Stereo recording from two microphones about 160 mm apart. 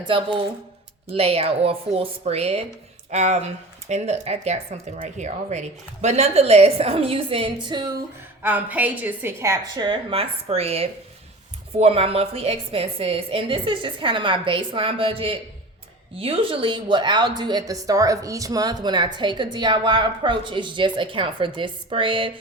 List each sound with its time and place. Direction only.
0.1 s speech: 30° right (ahead or behind)
8.4 s a woman's voice: 10° right (ahead or behind); by 22.3 s 30° right (ahead or behind)